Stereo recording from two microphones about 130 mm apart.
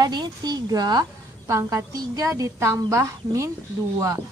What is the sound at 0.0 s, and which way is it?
A woman's voice, 35° right (ahead or behind).